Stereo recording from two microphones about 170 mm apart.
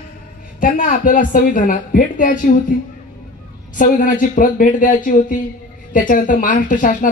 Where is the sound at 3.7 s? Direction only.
50° left (ahead or behind).